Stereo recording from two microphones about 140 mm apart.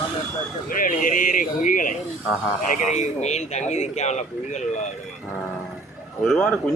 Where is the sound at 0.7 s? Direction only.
75° left (ahead or behind).